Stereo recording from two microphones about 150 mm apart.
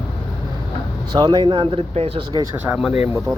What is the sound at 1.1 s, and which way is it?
Speech, 30° right (ahead or behind).